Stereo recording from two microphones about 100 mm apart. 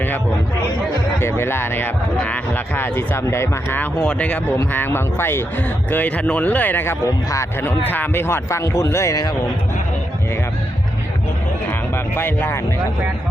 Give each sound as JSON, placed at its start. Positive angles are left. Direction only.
{"t": 1.2, "sound": "speech", "side_deg": 25}
{"t": 7.0, "sound": "speech", "side_deg": 35}
{"t": 7.6, "sound": "speech", "side_deg": 20}
{"t": 12.1, "sound": "speech", "side_deg": 20}